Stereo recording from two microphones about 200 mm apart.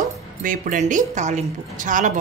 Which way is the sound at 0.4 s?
40° right (ahead or behind).